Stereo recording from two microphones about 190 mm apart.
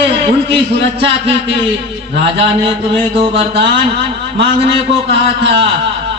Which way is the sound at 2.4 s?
30° right (ahead or behind).